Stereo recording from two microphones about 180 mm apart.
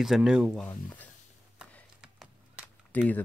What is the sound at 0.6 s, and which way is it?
Speech, 10° left (ahead or behind).